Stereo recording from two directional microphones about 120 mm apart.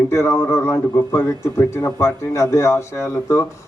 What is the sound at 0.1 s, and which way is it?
A man's voice, 20° left (ahead or behind).